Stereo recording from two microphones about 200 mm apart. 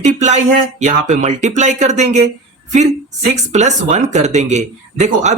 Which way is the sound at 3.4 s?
35° right (ahead or behind).